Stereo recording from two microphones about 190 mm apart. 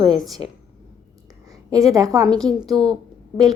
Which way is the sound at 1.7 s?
20° right (ahead or behind).